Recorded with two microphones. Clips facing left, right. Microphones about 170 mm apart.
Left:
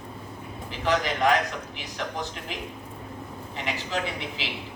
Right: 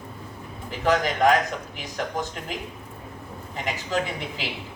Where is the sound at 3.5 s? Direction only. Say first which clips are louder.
Right 2 dB; 45° right (ahead or behind).